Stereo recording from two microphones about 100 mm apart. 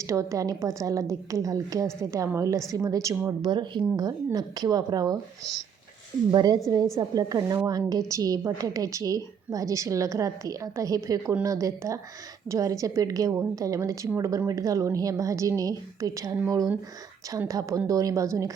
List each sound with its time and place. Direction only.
0.0 s a woman's voice: 30° right (ahead or behind)
3.4 s a woman's voice: 50° right (ahead or behind)
6.3 s a woman's voice: 45° right (ahead or behind)